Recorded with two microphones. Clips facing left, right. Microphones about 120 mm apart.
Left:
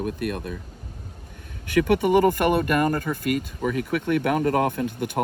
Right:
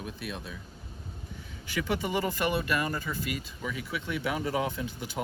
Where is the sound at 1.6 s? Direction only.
55° left (ahead or behind).